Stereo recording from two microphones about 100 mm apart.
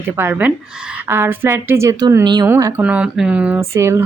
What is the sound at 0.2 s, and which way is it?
Speech, 20° right (ahead or behind).